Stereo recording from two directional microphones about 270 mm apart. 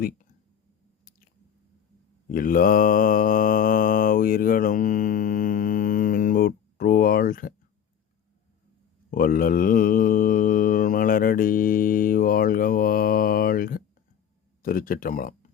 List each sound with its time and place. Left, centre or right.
2.3 s mantra: left
9.0 s mantra: left